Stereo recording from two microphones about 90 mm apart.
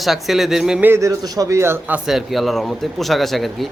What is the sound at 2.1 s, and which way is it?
Speech, centre (ahead or behind).